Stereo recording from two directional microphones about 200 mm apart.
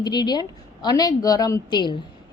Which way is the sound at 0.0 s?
20° left (ahead or behind).